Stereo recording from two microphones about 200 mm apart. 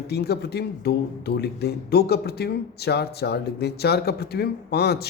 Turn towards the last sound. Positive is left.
turn(degrees=55)  # may be behind; listen again after turning